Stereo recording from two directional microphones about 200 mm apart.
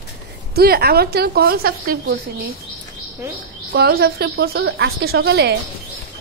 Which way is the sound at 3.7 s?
50° right (ahead or behind).